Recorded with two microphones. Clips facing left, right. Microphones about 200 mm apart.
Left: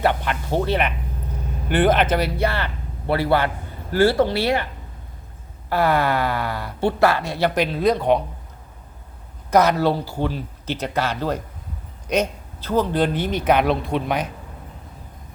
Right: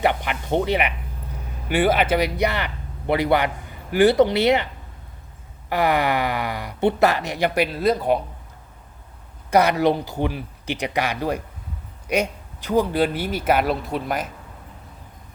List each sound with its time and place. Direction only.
0.0 s speech: 15° right (ahead or behind)
5.6 s speech: 15° right (ahead or behind)
9.5 s speech: 10° right (ahead or behind)